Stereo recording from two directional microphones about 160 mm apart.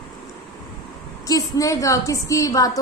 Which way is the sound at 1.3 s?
20° left (ahead or behind).